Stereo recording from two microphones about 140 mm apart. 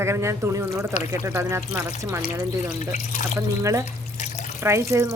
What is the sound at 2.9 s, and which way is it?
Speech, 65° left (ahead or behind).